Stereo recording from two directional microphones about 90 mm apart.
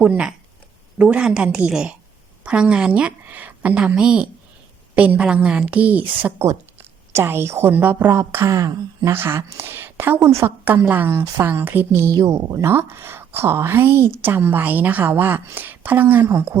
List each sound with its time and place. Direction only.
0.0 s a woman's voice: 15° right (ahead or behind)
6.4 s a woman's voice: 30° right (ahead or behind)
8.4 s speech: 35° right (ahead or behind)
9.0 s speech: 25° right (ahead or behind)
12.1 s speech: 45° right (ahead or behind); by 16.6 s 25° right (ahead or behind)